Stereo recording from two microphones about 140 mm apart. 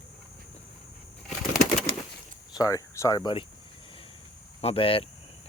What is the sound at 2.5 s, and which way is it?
Speech, 25° left (ahead or behind).